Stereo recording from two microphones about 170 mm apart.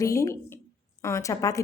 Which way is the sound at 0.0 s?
20° left (ahead or behind).